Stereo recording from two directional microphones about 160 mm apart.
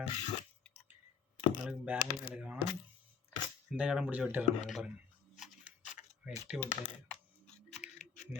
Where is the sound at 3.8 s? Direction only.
5° right (ahead or behind).